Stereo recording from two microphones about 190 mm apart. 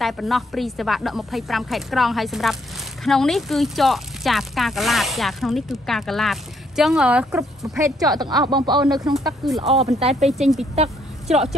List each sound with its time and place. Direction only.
0.0 s speech: centre (ahead or behind)
7.8 s speech: 20° right (ahead or behind)
9.4 s speech: centre (ahead or behind)
9.8 s speech: 35° right (ahead or behind)
10.2 s speech: centre (ahead or behind)
10.8 s a sound: 35° right (ahead or behind)